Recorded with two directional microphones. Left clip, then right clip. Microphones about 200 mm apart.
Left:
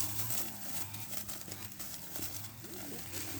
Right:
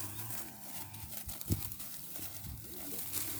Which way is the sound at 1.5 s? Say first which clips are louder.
Right 5 dB; 50° right (ahead or behind).